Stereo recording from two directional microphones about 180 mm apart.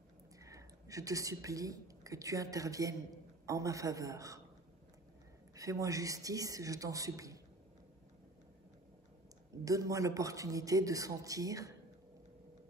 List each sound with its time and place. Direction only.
0.4 s speech: 20° right (ahead or behind)
5.5 s speech: 20° right (ahead or behind)
9.7 s speech: 20° right (ahead or behind)